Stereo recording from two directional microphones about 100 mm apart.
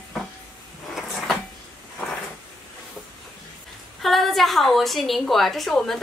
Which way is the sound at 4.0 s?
Centre (ahead or behind).